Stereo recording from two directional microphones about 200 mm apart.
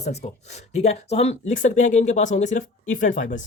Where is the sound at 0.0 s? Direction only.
35° left (ahead or behind).